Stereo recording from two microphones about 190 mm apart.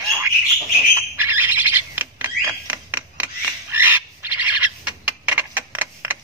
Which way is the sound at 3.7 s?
10° right (ahead or behind).